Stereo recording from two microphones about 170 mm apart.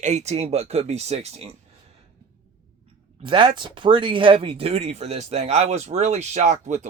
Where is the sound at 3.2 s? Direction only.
30° right (ahead or behind); by 6.9 s 45° right (ahead or behind).